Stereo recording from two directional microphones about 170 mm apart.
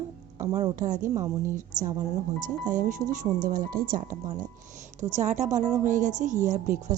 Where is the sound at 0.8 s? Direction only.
50° right (ahead or behind).